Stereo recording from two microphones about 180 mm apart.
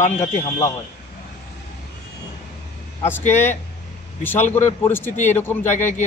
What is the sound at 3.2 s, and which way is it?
Speech, 40° left (ahead or behind).